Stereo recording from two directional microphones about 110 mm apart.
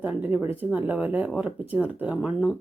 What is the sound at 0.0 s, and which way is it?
Speech, 15° right (ahead or behind).